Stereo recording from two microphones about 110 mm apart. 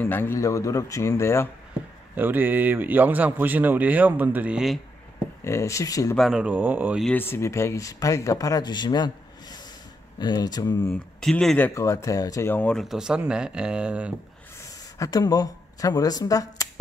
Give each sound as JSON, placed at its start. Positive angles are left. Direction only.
{"t": 0.0, "sound": "speech", "side_deg": 20}
{"t": 2.1, "sound": "speech", "side_deg": -20}
{"t": 5.4, "sound": "speech", "side_deg": 25}
{"t": 6.1, "sound": "speech", "side_deg": 0}
{"t": 6.4, "sound": "speech", "side_deg": -15}
{"t": 7.2, "sound": "speech", "side_deg": 20}
{"t": 10.9, "sound": "speech", "side_deg": 5}
{"t": 11.5, "sound": "speech", "side_deg": 15}
{"t": 11.8, "sound": "speech", "side_deg": 30}
{"t": 12.4, "sound": "speech", "side_deg": 15}
{"t": 12.7, "sound": "speech", "side_deg": -5}
{"t": 14.6, "sound": "speech", "side_deg": 30}